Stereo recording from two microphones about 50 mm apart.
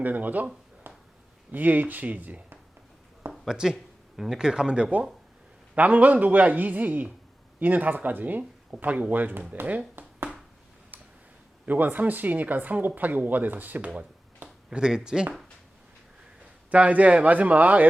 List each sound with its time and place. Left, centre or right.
0.0 s speech: right
3.5 s speech: centre
5.7 s speech: right
9.6 s speech: right
10.0 s finger snapping: right
11.6 s speech: right
14.4 s speech: centre
16.7 s speech: right